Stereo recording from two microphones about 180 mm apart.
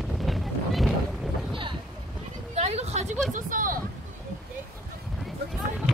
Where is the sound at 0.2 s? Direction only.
Centre (ahead or behind).